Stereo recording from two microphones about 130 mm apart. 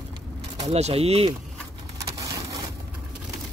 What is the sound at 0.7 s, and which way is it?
Speech, 50° right (ahead or behind).